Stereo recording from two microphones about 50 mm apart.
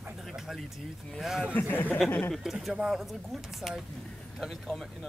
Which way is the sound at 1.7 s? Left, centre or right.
Left.